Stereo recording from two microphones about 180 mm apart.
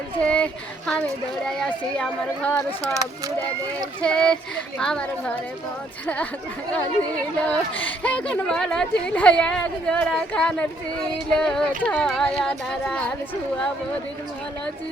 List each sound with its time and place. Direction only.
0.2 s speech: 5° left (ahead or behind)
2.8 s speech: 20° right (ahead or behind)
4.0 s speech: 5° left (ahead or behind)
7.4 s speech: 10° left (ahead or behind)